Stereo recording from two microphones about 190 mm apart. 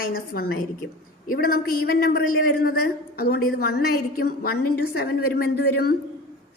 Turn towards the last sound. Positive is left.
turn(degrees=55)  # may be behind; listen again after turning